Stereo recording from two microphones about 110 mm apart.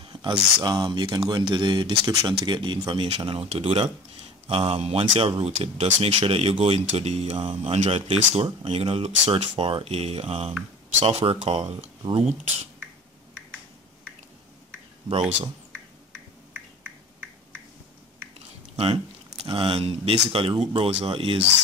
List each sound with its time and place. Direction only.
0.0 s speech: 50° right (ahead or behind); by 8.5 s 70° right (ahead or behind)
8.6 s speech: 60° right (ahead or behind)
19.4 s speech: 50° right (ahead or behind)